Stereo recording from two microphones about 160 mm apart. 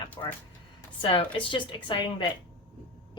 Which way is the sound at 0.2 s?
30° left (ahead or behind).